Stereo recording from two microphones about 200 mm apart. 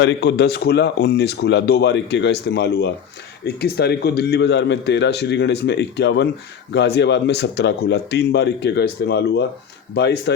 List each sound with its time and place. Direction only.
0.0 s a man's voice: 60° left (ahead or behind)